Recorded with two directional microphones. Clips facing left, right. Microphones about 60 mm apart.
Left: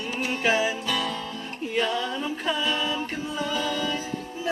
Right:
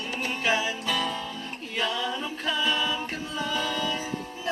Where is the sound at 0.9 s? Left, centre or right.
Centre.